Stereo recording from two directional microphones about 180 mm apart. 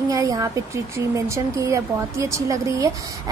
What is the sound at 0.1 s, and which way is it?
A woman's voice, 20° right (ahead or behind).